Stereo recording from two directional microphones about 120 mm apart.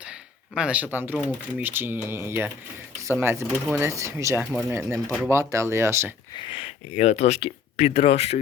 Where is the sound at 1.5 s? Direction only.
15° right (ahead or behind).